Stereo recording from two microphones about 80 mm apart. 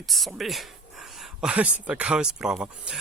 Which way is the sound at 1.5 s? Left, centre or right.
Centre.